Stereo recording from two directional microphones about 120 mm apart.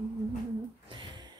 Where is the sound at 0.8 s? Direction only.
40° right (ahead or behind).